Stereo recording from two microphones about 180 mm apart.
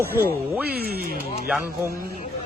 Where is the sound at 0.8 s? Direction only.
60° right (ahead or behind).